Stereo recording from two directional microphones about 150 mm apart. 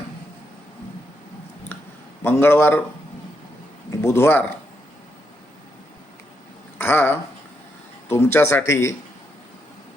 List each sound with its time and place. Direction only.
2.2 s speech: 15° left (ahead or behind)
4.0 s speech: 15° left (ahead or behind)
6.7 s a sound: 15° left (ahead or behind)
8.1 s speech: 15° left (ahead or behind)